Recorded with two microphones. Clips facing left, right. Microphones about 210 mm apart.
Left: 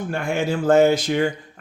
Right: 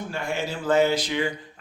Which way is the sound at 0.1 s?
50° left (ahead or behind).